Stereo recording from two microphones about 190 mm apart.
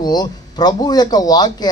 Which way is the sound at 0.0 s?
20° left (ahead or behind).